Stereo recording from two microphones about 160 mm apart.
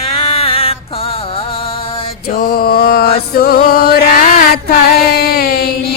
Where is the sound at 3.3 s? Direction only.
70° left (ahead or behind).